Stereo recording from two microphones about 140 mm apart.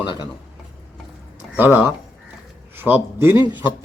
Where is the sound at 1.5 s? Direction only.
15° right (ahead or behind).